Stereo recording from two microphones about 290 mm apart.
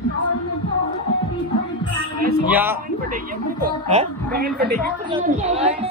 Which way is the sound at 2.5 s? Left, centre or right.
Centre.